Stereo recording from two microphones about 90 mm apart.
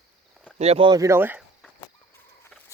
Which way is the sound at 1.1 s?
25° right (ahead or behind).